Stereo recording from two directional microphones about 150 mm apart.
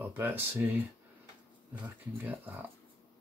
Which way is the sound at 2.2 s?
10° right (ahead or behind).